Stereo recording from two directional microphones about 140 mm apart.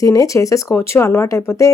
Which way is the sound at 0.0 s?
25° left (ahead or behind).